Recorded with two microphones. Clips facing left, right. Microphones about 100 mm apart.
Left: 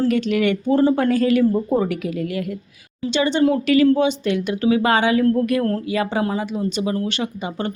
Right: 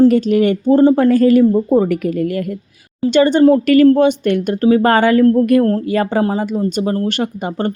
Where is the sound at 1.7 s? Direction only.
40° right (ahead or behind).